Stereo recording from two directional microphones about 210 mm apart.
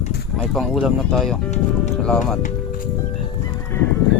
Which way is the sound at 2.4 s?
40° left (ahead or behind).